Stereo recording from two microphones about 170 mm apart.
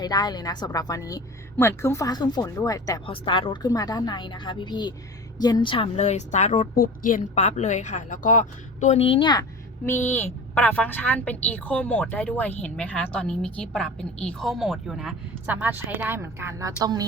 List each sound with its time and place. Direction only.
0.0 s a woman's voice: 25° left (ahead or behind)
9.8 s a woman's voice: 15° left (ahead or behind); by 17.1 s 20° right (ahead or behind)